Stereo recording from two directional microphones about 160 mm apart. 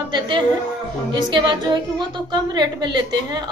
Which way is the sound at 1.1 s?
30° right (ahead or behind).